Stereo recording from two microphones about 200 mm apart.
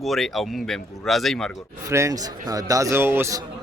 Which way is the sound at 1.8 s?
15° right (ahead or behind).